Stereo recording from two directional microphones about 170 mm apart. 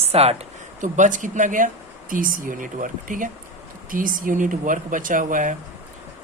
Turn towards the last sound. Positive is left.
turn(degrees=-50)  # may be behind; listen again after turning